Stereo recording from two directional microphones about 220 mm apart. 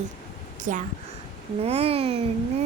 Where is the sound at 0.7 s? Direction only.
35° right (ahead or behind).